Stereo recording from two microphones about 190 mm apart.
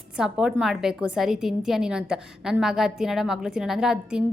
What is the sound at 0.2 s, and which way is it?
A woman's voice, 5° right (ahead or behind).